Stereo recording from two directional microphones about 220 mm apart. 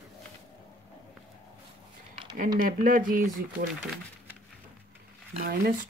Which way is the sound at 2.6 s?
40° right (ahead or behind).